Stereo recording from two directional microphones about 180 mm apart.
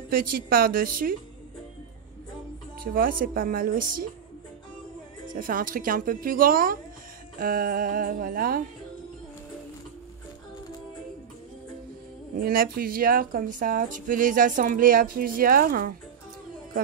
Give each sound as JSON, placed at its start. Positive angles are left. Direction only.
{"t": 0.1, "sound": "speech", "side_deg": -55}
{"t": 2.8, "sound": "speech", "side_deg": -50}
{"t": 5.3, "sound": "speech", "side_deg": -50}
{"t": 12.4, "sound": "speech", "side_deg": -55}